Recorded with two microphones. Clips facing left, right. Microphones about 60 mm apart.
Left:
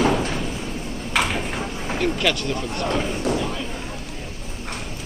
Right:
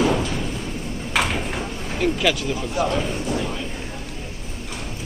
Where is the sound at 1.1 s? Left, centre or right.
Centre.